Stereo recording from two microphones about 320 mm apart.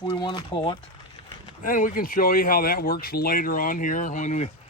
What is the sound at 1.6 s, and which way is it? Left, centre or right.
Speech, left.